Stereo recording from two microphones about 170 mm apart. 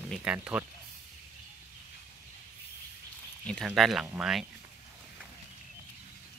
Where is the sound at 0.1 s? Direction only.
5° right (ahead or behind).